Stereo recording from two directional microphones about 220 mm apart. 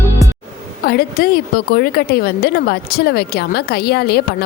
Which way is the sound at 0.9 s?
45° left (ahead or behind).